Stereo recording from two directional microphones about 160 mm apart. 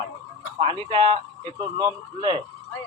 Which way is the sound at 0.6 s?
30° right (ahead or behind).